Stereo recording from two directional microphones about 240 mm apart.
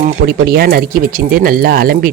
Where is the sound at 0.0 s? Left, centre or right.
Right.